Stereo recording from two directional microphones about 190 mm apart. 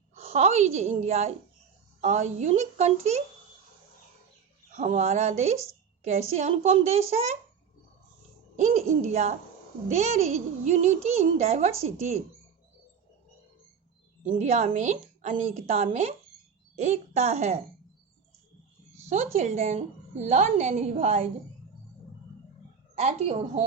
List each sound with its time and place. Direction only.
0.1 s a woman's voice: 35° right (ahead or behind)
4.7 s a woman's voice: 35° right (ahead or behind)
8.5 s a woman's voice: 35° right (ahead or behind)
14.3 s a woman's voice: 40° right (ahead or behind)
19.0 s a woman's voice: 35° right (ahead or behind)
23.0 s a woman's voice: 35° right (ahead or behind)